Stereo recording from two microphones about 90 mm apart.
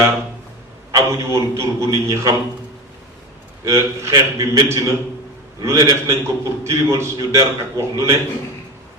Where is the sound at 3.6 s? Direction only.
35° right (ahead or behind).